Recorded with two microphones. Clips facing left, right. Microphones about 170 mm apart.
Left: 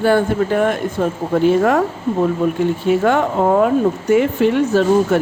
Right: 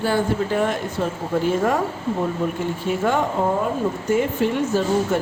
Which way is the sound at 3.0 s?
70° left (ahead or behind).